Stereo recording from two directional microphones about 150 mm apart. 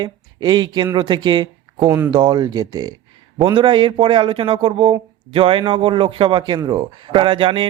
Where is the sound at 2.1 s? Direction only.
30° right (ahead or behind).